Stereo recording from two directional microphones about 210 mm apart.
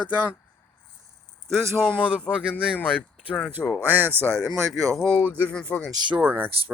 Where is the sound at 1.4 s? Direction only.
10° right (ahead or behind).